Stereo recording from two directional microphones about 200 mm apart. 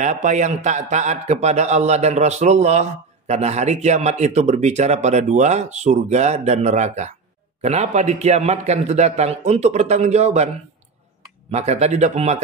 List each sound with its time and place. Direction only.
0.0 s a man's voice: 35° right (ahead or behind)
11.5 s a man's voice: 35° right (ahead or behind)